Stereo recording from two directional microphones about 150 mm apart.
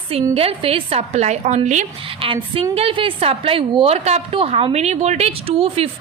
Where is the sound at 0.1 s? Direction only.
40° right (ahead or behind).